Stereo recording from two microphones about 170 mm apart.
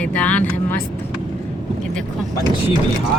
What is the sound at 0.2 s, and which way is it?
Speech, 10° left (ahead or behind).